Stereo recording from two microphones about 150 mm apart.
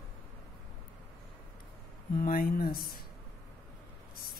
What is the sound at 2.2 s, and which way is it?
Speech, 70° left (ahead or behind).